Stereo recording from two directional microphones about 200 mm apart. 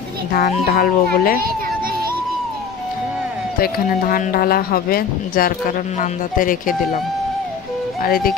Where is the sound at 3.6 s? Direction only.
45° left (ahead or behind).